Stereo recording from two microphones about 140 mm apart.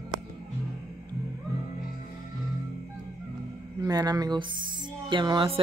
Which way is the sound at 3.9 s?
25° right (ahead or behind).